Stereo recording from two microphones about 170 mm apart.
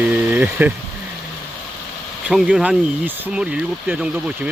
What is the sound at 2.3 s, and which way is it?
Speech, 5° right (ahead or behind).